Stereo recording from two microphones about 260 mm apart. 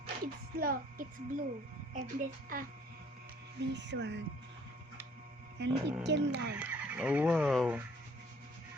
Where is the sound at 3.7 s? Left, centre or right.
Right.